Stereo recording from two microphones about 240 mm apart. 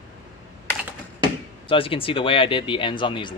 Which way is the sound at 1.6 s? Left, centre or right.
Left.